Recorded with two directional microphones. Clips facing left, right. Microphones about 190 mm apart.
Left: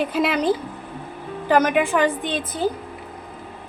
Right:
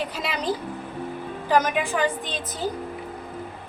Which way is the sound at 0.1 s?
55° left (ahead or behind).